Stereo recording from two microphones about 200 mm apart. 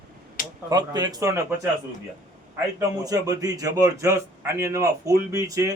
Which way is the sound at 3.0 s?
20° right (ahead or behind).